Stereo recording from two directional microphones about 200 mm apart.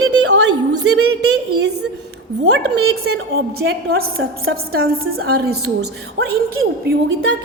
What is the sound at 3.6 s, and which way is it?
Speech, 50° right (ahead or behind).